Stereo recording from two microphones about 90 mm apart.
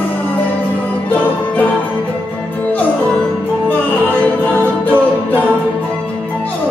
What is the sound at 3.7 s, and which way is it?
A capella, 20° left (ahead or behind).